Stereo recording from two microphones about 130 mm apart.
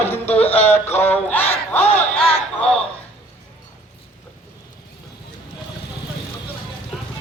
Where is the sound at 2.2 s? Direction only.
50° left (ahead or behind).